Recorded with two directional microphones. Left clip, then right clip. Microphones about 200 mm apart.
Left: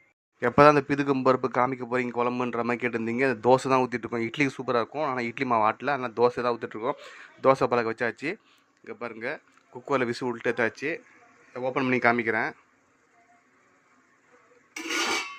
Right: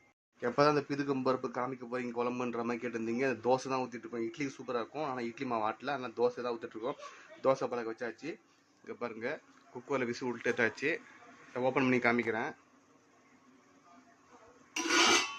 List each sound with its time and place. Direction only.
0.3 s a man's voice: 25° left (ahead or behind)
8.8 s speech: 20° left (ahead or behind)
9.8 s speech: 30° left (ahead or behind)